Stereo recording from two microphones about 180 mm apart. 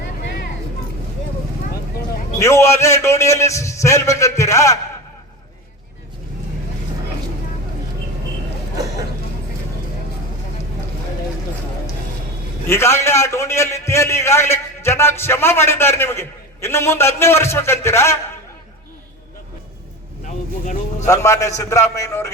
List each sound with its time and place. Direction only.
2.4 s a man's voice: 15° left (ahead or behind)
12.6 s a man's voice: 15° left (ahead or behind)
20.2 s vehicle: 45° left (ahead or behind)
21.1 s a man's voice: 20° left (ahead or behind)